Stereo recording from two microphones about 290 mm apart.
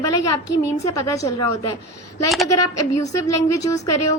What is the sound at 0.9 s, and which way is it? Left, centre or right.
Speech, centre.